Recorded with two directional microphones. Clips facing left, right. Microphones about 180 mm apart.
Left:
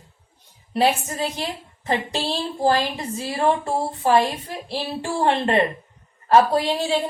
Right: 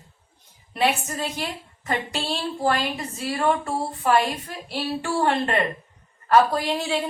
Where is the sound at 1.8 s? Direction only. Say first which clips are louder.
Left 3 dB; 30° left (ahead or behind).